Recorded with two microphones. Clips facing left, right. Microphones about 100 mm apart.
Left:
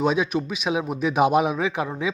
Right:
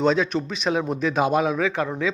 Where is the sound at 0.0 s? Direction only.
10° left (ahead or behind).